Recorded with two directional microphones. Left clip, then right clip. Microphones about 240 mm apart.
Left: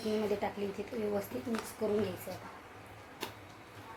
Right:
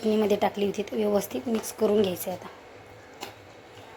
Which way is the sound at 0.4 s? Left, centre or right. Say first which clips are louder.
Right 11 dB; right.